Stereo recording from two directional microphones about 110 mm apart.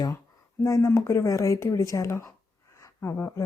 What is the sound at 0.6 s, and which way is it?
Speech, 25° left (ahead or behind).